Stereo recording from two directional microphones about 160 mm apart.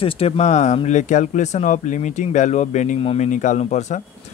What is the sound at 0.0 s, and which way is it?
Speech, 40° left (ahead or behind).